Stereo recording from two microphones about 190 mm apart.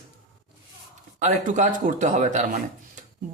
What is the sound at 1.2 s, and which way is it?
A man's voice, 40° right (ahead or behind).